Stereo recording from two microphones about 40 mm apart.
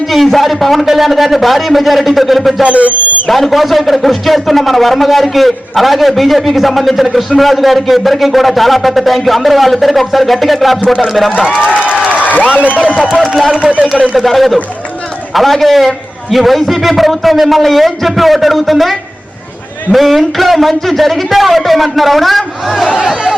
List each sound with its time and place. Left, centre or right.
0.1 s a sound: centre
0.9 s a man's voice: centre
2.6 s a man's voice: right
3.2 s a man's voice: centre
12.1 s a sound: left
13.1 s a man's voice: centre
13.6 s a man's voice: right
14.2 s a man's voice: centre